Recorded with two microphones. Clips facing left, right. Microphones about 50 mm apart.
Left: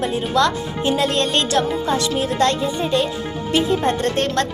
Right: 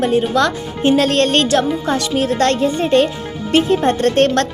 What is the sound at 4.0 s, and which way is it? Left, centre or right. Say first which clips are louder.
Speech: right 6 dB; right.